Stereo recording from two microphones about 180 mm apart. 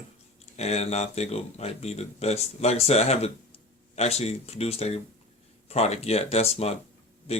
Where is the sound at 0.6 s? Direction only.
35° left (ahead or behind).